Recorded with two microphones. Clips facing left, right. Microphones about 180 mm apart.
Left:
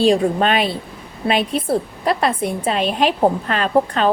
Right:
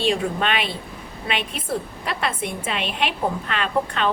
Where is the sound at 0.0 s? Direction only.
40° left (ahead or behind).